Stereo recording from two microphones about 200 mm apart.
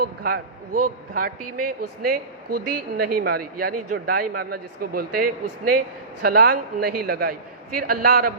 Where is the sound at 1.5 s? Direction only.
50° right (ahead or behind).